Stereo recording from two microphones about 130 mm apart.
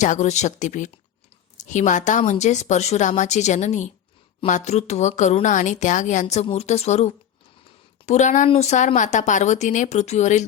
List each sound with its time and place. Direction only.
0.0 s a woman's voice: 65° left (ahead or behind)
8.4 s a woman's voice: 55° left (ahead or behind)